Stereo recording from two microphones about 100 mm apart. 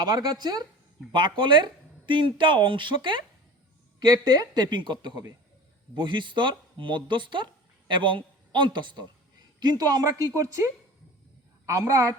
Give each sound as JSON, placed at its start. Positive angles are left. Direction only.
{"t": 0.0, "sound": "a woman's voice", "side_deg": -45}